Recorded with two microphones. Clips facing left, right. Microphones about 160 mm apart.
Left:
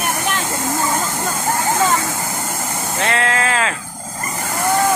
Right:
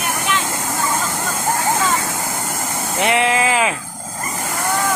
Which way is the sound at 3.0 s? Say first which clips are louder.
Right 3 dB; 15° right (ahead or behind).